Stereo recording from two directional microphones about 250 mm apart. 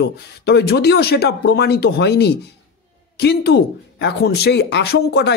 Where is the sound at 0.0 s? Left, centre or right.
Left.